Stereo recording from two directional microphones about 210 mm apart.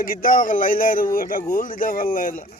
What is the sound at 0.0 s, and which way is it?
Speech, 40° left (ahead or behind).